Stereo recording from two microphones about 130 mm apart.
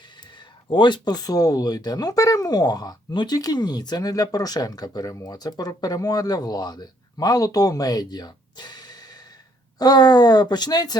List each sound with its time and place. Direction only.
0.7 s speech: 35° left (ahead or behind)